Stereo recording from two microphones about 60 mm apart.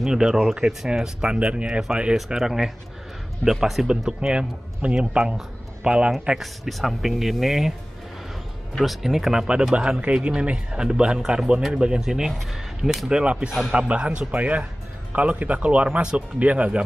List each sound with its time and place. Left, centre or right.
0.0 s speech: centre
6.4 s speech: centre
8.8 s speech: centre
12.3 s speech: centre
13.2 s speech: centre